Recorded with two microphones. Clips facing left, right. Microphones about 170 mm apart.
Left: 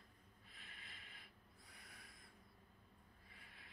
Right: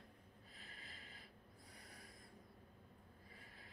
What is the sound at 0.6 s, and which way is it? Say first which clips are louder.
Snort: right 2 dB; 35° right (ahead or behind).